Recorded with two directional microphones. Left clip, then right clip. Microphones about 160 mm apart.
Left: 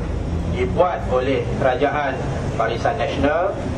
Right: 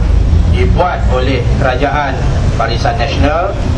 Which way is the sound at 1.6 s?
10° right (ahead or behind).